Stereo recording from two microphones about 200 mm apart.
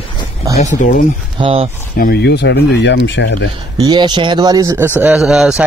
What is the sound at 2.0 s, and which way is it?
Speech, 50° left (ahead or behind).